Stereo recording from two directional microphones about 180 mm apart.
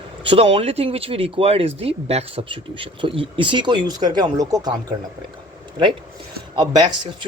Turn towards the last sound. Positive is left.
turn(degrees=-25)  # may be behind; listen again after turning